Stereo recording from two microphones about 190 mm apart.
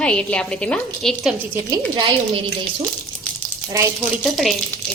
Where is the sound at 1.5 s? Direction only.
15° right (ahead or behind).